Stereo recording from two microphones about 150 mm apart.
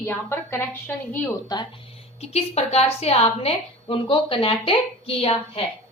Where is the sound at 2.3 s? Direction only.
45° left (ahead or behind).